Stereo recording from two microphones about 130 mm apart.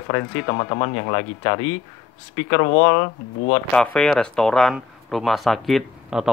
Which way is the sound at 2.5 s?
60° left (ahead or behind).